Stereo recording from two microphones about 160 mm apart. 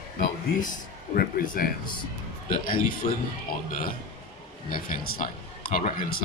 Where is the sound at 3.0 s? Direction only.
45° left (ahead or behind).